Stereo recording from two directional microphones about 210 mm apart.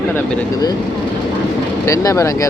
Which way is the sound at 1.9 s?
15° left (ahead or behind).